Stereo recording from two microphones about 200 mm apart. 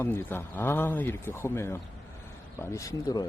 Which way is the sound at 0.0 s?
10° left (ahead or behind).